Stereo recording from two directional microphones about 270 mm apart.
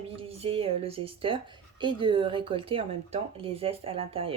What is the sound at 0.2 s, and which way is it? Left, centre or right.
Speech, right.